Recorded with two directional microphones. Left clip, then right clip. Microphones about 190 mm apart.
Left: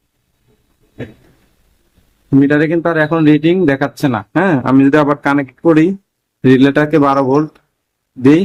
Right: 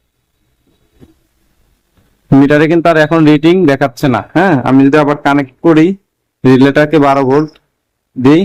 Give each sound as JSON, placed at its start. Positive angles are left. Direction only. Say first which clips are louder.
{"t": 2.5, "sound": "speech", "louder": "right 5 dB", "side_deg": -30}